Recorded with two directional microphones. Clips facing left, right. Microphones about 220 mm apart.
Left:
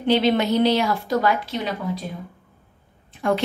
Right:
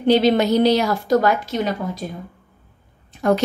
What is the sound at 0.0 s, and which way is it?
A woman's voice, 40° right (ahead or behind).